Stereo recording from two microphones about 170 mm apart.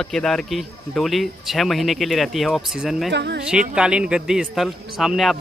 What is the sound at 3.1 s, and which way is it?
Speech, 90° right.